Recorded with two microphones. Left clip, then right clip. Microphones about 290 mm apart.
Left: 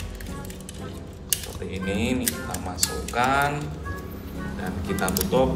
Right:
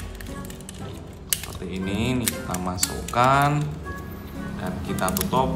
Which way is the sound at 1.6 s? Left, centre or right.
Centre.